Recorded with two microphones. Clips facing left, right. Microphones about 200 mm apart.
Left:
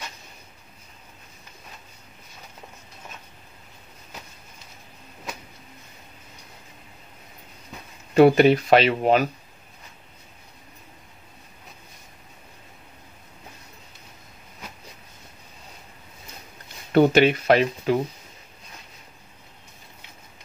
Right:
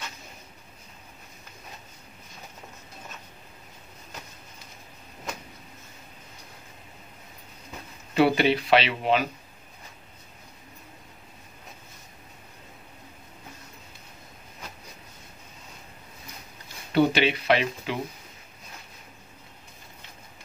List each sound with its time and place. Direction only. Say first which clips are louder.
8.1 s speech: left 7 dB; 45° left (ahead or behind)
16.9 s speech: left 5 dB; 50° left (ahead or behind)